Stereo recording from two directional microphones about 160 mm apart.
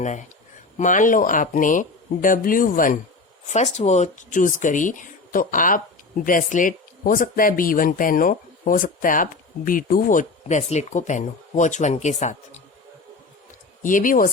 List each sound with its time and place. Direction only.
0.0 s speech: 50° left (ahead or behind)
3.4 s speech: 45° left (ahead or behind)
10.6 s speech: 45° left (ahead or behind)
13.8 s speech: 55° left (ahead or behind)